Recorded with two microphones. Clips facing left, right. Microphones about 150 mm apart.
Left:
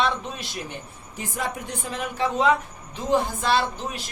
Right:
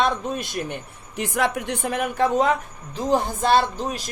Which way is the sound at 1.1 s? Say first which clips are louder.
Right 7 dB; 75° right (ahead or behind).